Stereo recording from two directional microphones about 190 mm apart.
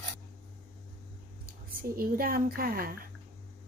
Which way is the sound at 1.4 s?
50° right (ahead or behind).